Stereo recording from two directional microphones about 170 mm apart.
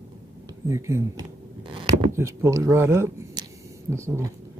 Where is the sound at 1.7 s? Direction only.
30° right (ahead or behind).